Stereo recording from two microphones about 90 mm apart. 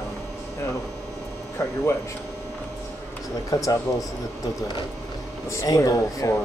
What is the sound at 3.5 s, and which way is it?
Speech, 40° left (ahead or behind).